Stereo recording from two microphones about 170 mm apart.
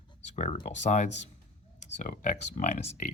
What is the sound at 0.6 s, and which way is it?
Speech, 45° left (ahead or behind).